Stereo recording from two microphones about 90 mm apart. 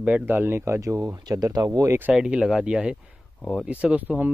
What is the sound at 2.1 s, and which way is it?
Speech, 10° right (ahead or behind).